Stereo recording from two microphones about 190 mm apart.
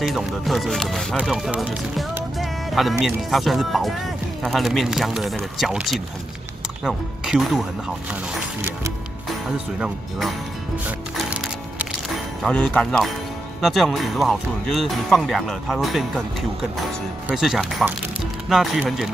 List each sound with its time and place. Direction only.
0.0 s speech: centre (ahead or behind)
9.8 s speech: centre (ahead or behind)
12.4 s speech: 5° left (ahead or behind)
17.3 s speech: centre (ahead or behind)